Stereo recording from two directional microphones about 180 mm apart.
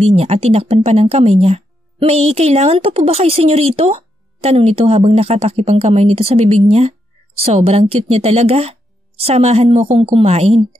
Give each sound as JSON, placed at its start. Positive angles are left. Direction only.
{"t": 0.0, "sound": "speech", "side_deg": -35}